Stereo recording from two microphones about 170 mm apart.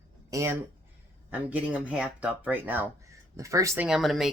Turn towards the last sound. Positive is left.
turn(degrees=0)  # may be behind; listen again after turning